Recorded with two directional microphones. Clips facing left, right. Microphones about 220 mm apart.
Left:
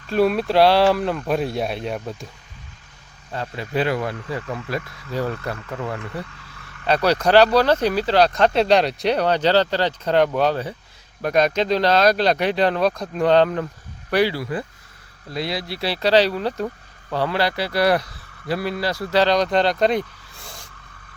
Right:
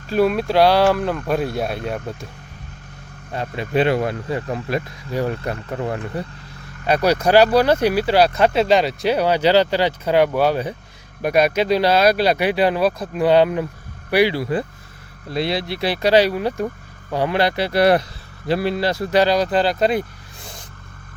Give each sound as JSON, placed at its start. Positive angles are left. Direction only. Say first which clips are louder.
{"t": 0.1, "sound": "speech", "louder": "right 1 dB", "side_deg": 0}
{"t": 3.3, "sound": "speech", "louder": "right 4 dB", "side_deg": -20}
{"t": 4.7, "sound": "speech", "louder": "right 3 dB", "side_deg": -15}
{"t": 5.5, "sound": "speech", "louder": "right 4 dB", "side_deg": -30}
{"t": 6.8, "sound": "speech", "louder": "right 1 dB", "side_deg": -10}
{"t": 15.3, "sound": "speech", "louder": "right 4 dB", "side_deg": -25}
{"t": 19.2, "sound": "speech", "louder": "even", "side_deg": -5}
{"t": 20.4, "sound": "vehicle", "louder": "right 2 dB", "side_deg": -20}